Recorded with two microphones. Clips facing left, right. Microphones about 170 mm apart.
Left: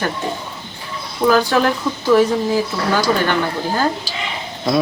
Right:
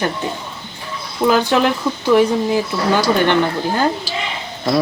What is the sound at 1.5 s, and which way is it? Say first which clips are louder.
Speech: right 1 dB; 20° right (ahead or behind).